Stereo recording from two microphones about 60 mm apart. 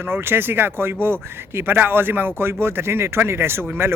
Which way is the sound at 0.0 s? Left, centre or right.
Right.